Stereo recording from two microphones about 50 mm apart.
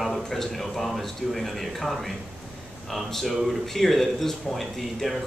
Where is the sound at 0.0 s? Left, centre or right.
Centre.